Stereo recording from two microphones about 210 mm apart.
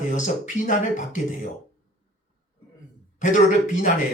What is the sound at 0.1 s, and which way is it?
Speech, 35° left (ahead or behind).